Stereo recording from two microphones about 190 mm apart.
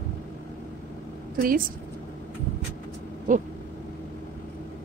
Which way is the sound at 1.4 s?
50° right (ahead or behind).